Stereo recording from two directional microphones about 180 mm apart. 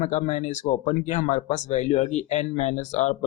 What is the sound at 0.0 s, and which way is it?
Speech, 40° left (ahead or behind).